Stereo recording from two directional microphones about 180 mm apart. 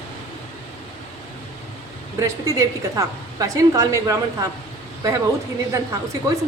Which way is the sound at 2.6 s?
20° right (ahead or behind).